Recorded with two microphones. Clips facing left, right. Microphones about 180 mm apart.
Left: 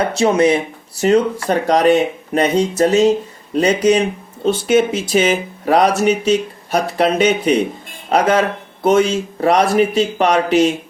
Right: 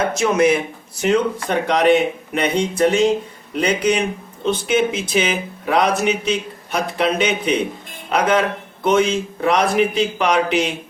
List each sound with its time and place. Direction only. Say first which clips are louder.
0.2 s speech: left 3 dB; 30° left (ahead or behind)